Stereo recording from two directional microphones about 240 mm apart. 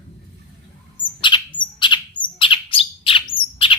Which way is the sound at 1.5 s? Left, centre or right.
Centre.